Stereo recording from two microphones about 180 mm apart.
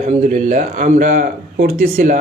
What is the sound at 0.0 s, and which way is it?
Speech, 45° right (ahead or behind).